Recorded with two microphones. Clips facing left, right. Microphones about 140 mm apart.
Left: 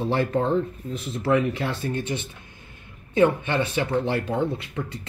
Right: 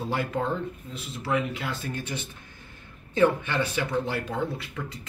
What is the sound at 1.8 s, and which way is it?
Speech, 25° left (ahead or behind).